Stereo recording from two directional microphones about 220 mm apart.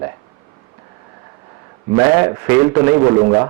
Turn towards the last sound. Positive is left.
turn(degrees=-20)  # may be behind; listen again after turning